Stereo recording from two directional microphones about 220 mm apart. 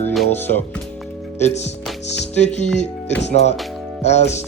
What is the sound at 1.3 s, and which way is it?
Speech, 30° left (ahead or behind).